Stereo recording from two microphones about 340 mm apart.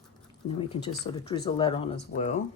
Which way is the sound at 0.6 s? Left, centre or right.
Centre.